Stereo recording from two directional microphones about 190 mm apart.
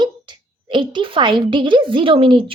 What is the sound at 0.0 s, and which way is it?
A woman's voice, 25° right (ahead or behind).